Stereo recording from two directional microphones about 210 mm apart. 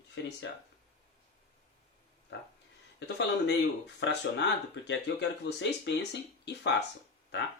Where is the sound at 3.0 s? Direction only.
55° left (ahead or behind).